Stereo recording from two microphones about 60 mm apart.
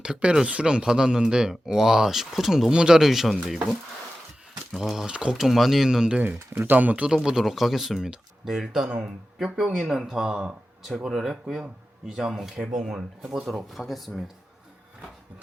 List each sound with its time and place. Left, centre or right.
0.0 s speech: centre
4.8 s speech: centre
5.4 s speech: centre
6.5 s speech: right
6.7 s speech: right
7.1 s speech: centre
8.9 s speech: right
9.8 s speech: centre